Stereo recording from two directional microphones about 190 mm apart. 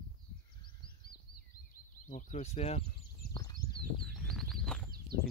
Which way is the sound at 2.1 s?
40° left (ahead or behind).